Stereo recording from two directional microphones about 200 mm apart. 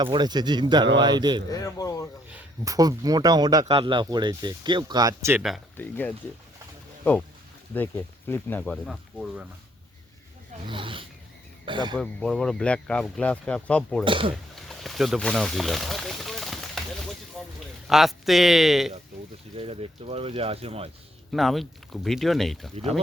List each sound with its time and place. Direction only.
0.0 s speech: 20° right (ahead or behind)
1.5 s speech: 15° left (ahead or behind)
2.3 s speech: 15° right (ahead or behind)
5.4 s speech: centre (ahead or behind)
7.7 s speech: 10° left (ahead or behind)
10.7 s speech: 25° right (ahead or behind)
11.9 s speech: 5° left (ahead or behind)
14.0 s speech: 25° right (ahead or behind)
14.5 s a sound: centre (ahead or behind)
17.8 s speech: centre (ahead or behind)
19.5 s speech: 25° right (ahead or behind)
21.3 s speech: centre (ahead or behind)
22.7 s speech: 30° right (ahead or behind)